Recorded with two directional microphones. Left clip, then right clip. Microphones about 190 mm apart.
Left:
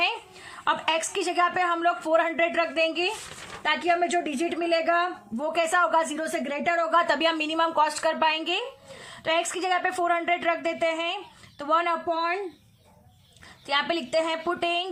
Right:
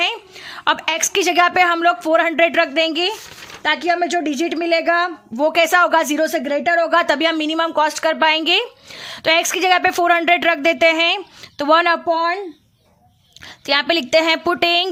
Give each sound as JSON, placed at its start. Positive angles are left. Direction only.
{"t": 0.0, "sound": "a woman's voice", "side_deg": -45}
{"t": 3.6, "sound": "speech", "side_deg": -55}
{"t": 7.1, "sound": "speech", "side_deg": -35}
{"t": 13.7, "sound": "speech", "side_deg": -50}